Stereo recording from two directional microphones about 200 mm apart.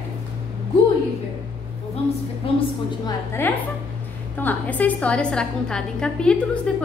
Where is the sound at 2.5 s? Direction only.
25° left (ahead or behind).